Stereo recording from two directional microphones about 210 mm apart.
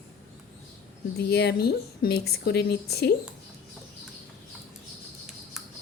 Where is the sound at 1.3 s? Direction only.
50° left (ahead or behind).